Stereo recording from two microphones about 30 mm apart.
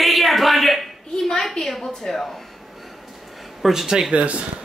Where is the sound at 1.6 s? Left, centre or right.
Centre.